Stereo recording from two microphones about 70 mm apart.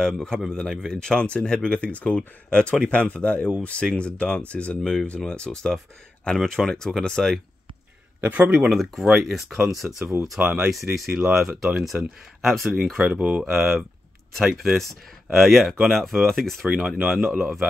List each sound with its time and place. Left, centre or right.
0.0 s speech: centre
8.2 s speech: right
8.6 s speech: centre
10.9 s speech: right
11.3 s speech: centre
13.0 s speech: centre
13.4 s speech: centre